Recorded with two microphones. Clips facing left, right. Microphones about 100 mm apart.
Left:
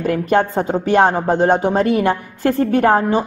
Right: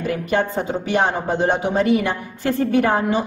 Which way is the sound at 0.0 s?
50° left (ahead or behind).